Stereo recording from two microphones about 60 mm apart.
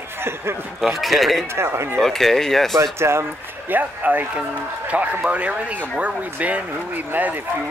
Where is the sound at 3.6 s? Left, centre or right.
Right.